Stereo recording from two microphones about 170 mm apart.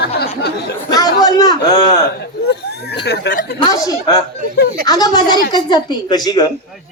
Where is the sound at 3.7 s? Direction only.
20° left (ahead or behind).